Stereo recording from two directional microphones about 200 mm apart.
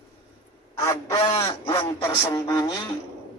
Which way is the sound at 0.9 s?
20° left (ahead or behind).